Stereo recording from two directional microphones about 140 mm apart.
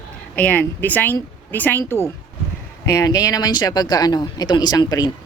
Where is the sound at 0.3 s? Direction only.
10° left (ahead or behind).